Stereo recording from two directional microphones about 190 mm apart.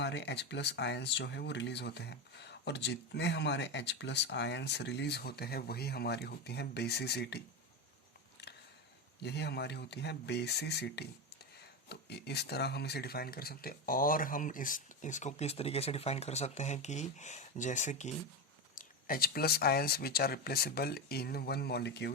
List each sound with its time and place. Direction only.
0.0 s speech: 65° left (ahead or behind)
9.2 s speech: 60° left (ahead or behind)